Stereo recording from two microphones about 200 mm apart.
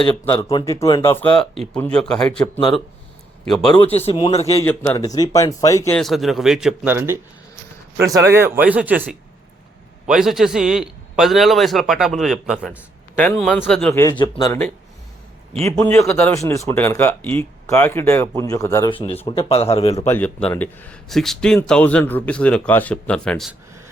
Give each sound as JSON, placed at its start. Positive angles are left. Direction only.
{"t": 0.3, "sound": "speech", "side_deg": 15}
{"t": 3.4, "sound": "a man's voice", "side_deg": 0}
{"t": 3.9, "sound": "a man's voice", "side_deg": 30}
{"t": 4.6, "sound": "speech", "side_deg": 10}
{"t": 6.0, "sound": "a man's voice", "side_deg": 0}
{"t": 10.1, "sound": "speech", "side_deg": 0}
{"t": 15.7, "sound": "speech", "side_deg": 10}
{"t": 20.1, "sound": "speech", "side_deg": 10}